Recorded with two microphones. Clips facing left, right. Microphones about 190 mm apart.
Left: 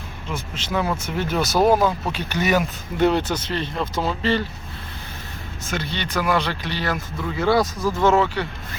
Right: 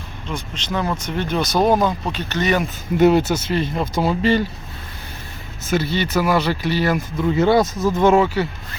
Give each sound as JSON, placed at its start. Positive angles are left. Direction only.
{"t": 0.3, "sound": "speech", "side_deg": 5}
{"t": 3.0, "sound": "speech", "side_deg": -10}
{"t": 5.7, "sound": "speech", "side_deg": -5}
{"t": 7.3, "sound": "speech", "side_deg": -20}